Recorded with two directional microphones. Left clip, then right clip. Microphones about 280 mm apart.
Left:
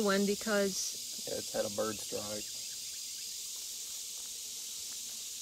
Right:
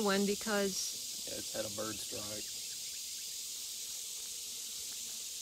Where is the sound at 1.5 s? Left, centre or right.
Left.